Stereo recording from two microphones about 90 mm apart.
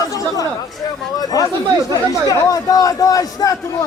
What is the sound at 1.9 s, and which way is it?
Speech, 40° left (ahead or behind).